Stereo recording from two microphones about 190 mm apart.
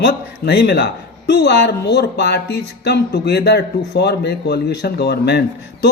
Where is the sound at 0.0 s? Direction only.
60° left (ahead or behind).